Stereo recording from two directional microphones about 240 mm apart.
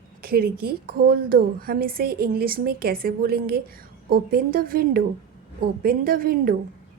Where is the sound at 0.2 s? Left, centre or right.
Right.